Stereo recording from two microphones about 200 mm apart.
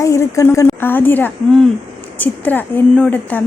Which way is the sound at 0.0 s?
15° left (ahead or behind).